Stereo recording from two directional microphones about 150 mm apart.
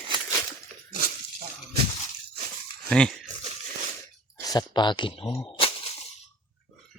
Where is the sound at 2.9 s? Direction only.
5° left (ahead or behind).